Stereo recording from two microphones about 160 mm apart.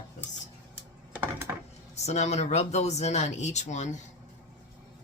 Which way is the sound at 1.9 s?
45° left (ahead or behind).